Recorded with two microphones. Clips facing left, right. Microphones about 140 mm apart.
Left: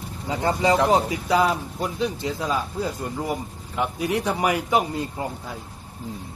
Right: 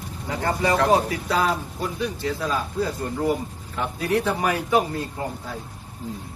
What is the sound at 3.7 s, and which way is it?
Speech, 15° left (ahead or behind).